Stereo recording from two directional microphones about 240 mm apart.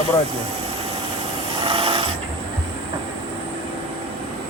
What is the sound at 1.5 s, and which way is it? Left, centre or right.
Filing, right.